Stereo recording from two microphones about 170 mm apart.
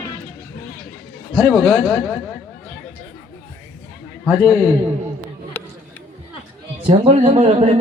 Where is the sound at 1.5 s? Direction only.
5° left (ahead or behind).